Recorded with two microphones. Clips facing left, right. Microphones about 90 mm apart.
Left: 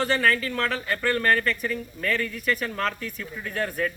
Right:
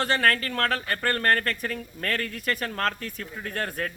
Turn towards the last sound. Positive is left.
turn(degrees=-50)  # may be behind; listen again after turning